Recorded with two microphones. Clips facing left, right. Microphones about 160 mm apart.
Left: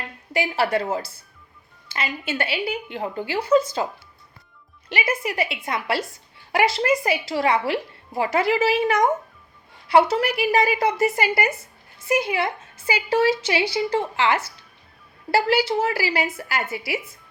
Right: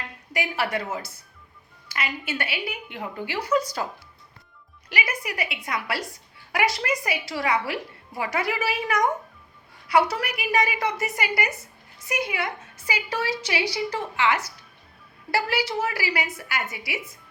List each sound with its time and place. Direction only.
0.3 s a woman's voice: 30° left (ahead or behind)
4.9 s a woman's voice: 25° left (ahead or behind)